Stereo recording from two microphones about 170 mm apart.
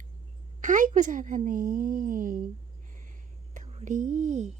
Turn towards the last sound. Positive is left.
turn(degrees=-45)  # may be behind; listen again after turning